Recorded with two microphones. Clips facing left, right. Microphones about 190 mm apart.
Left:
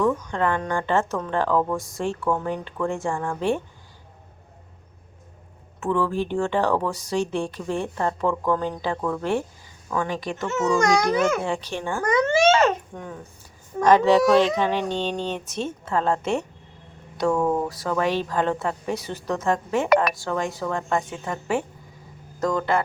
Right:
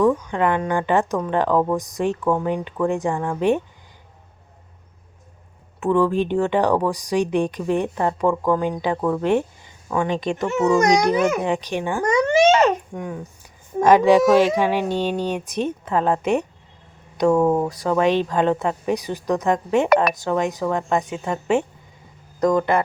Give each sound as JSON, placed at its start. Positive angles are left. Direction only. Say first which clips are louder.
{"t": 0.0, "sound": "speech", "louder": "right 4 dB", "side_deg": -15}
{"t": 5.8, "sound": "speech", "louder": "right 5 dB", "side_deg": -15}